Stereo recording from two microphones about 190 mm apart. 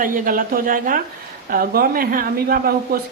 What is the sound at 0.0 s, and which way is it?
A woman's voice, 45° right (ahead or behind).